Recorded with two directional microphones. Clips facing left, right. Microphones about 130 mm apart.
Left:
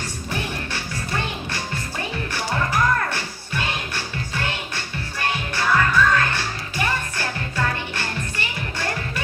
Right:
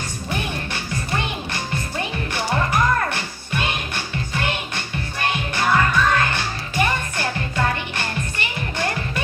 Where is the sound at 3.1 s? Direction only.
20° right (ahead or behind).